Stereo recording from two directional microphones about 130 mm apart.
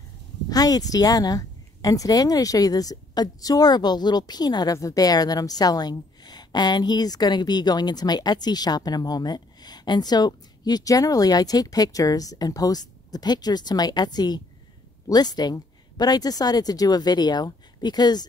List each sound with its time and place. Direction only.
0.5 s a woman's voice: 30° left (ahead or behind)